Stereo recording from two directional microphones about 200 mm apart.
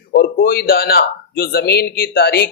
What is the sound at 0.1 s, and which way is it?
Speech, 50° left (ahead or behind).